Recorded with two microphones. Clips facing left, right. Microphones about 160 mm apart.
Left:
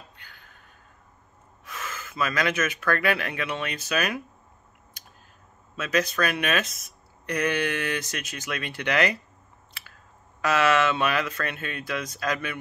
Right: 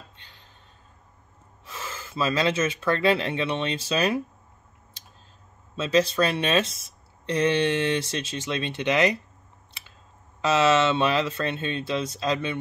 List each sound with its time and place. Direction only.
0.2 s a sound: 25° right (ahead or behind)
1.7 s speech: 30° right (ahead or behind)
5.0 s clicking: 25° right (ahead or behind)
5.8 s speech: 25° right (ahead or behind)
10.4 s speech: 25° right (ahead or behind)